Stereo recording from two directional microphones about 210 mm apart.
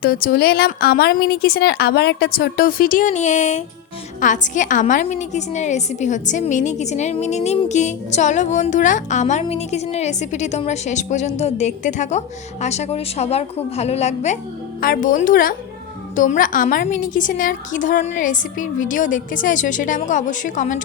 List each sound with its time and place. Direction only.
0.0 s a woman's voice: 45° left (ahead or behind)